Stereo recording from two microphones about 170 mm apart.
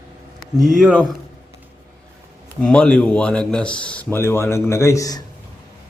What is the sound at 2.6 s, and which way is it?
Speech, 5° left (ahead or behind).